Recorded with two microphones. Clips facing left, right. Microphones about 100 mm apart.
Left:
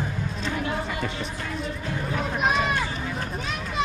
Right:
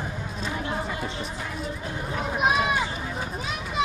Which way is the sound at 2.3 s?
5° right (ahead or behind).